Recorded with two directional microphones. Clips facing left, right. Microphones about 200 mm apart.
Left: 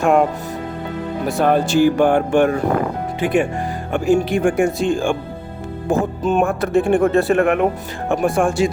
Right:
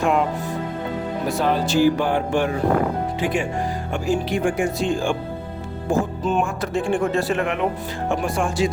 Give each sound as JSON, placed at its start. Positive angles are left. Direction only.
{"t": 0.0, "sound": "speech", "side_deg": 45}
{"t": 1.4, "sound": "music", "side_deg": 55}
{"t": 3.2, "sound": "speech", "side_deg": 60}
{"t": 8.1, "sound": "music", "side_deg": 55}